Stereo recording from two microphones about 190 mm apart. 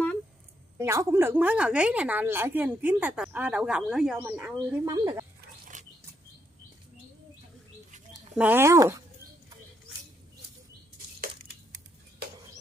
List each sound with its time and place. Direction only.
0.7 s a woman's voice: 15° right (ahead or behind)
5.7 s chirp: 40° right (ahead or behind)
8.4 s a woman's voice: 10° right (ahead or behind)